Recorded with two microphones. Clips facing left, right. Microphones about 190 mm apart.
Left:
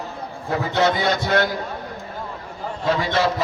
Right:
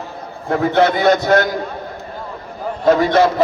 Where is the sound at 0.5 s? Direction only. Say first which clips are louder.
Right 6 dB; 55° right (ahead or behind).